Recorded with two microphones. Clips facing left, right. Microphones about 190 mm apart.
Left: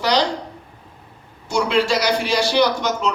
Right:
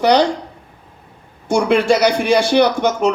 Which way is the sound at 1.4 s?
55° right (ahead or behind).